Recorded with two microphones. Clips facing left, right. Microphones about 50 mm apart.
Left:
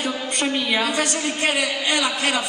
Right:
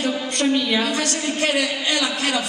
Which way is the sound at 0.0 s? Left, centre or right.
Centre.